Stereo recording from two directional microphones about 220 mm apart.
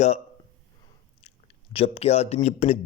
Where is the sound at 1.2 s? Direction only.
25° left (ahead or behind).